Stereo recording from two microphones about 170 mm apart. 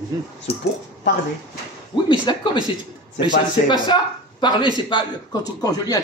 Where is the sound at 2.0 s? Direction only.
30° left (ahead or behind).